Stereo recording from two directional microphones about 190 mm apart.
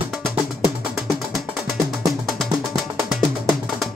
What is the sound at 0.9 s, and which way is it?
Music, centre (ahead or behind).